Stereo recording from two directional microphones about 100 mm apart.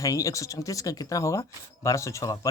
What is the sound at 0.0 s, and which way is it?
Speech, 35° left (ahead or behind).